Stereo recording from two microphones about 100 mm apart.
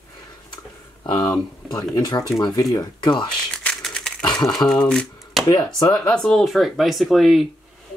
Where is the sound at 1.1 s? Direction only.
40° left (ahead or behind).